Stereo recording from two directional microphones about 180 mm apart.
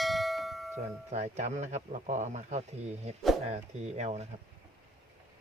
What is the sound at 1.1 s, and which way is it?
Speech, 40° right (ahead or behind).